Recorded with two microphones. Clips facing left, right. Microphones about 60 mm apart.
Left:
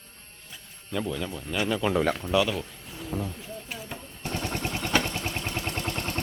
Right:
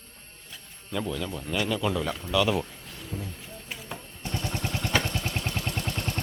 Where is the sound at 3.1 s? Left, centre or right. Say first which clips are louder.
Left 5 dB; left.